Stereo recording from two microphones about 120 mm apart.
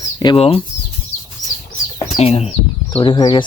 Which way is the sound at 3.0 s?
40° left (ahead or behind).